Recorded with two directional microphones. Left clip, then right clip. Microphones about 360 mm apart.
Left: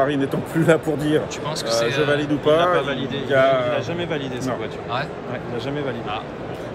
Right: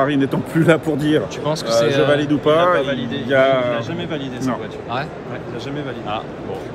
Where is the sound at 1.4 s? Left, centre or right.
Centre.